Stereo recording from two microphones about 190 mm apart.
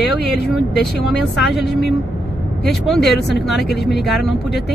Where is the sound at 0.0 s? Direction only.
60° left (ahead or behind).